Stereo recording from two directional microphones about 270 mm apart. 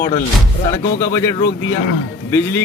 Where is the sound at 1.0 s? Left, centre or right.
Centre.